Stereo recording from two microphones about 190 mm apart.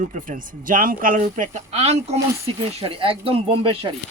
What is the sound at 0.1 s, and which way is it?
A man's voice, 45° right (ahead or behind).